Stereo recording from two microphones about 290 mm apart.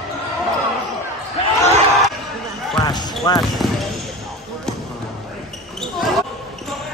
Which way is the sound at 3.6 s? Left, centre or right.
Centre.